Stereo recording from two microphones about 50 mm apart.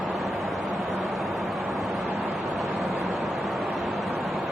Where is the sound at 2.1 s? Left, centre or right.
Right.